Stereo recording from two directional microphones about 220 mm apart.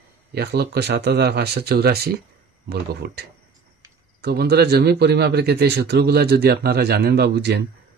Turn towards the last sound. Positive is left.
turn(degrees=-50)  # may be behind; listen again after turning